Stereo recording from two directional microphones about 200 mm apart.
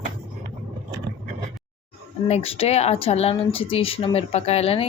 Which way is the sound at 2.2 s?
30° left (ahead or behind).